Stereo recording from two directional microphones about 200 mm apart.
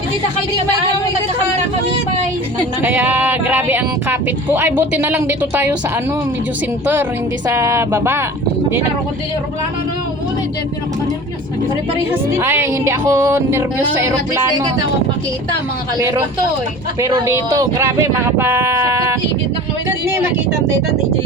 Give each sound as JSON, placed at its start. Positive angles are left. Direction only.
{"t": 2.8, "sound": "speech", "side_deg": -10}
{"t": 7.5, "sound": "speech", "side_deg": -15}
{"t": 12.3, "sound": "speech", "side_deg": -10}
{"t": 17.0, "sound": "speech", "side_deg": -20}